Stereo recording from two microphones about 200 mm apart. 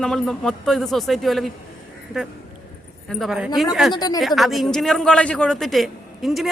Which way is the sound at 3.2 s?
5° right (ahead or behind).